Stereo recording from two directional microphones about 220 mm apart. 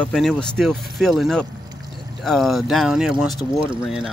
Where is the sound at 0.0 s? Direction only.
Centre (ahead or behind).